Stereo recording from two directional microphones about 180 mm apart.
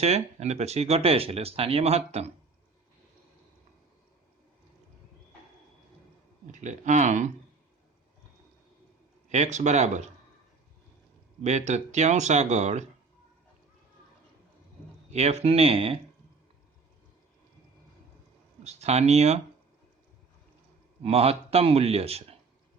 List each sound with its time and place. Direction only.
0.0 s speech: 35° right (ahead or behind)
6.5 s speech: 40° right (ahead or behind)
9.3 s speech: 40° right (ahead or behind)
11.4 s speech: 40° right (ahead or behind)
15.1 s speech: 35° right (ahead or behind)
18.6 s speech: 35° right (ahead or behind)
21.0 s speech: 35° right (ahead or behind)